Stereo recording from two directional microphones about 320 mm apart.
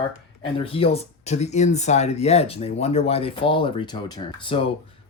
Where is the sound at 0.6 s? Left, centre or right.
Centre.